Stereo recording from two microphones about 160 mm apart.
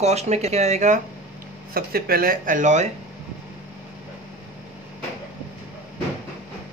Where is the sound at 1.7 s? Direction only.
70° right (ahead or behind); by 2.9 s 50° right (ahead or behind).